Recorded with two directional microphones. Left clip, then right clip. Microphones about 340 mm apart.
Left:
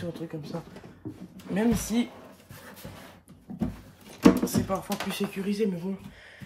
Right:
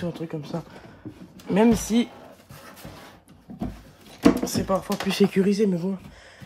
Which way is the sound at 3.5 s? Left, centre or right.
Centre.